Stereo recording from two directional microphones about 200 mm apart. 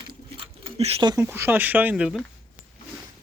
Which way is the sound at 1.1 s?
10° right (ahead or behind).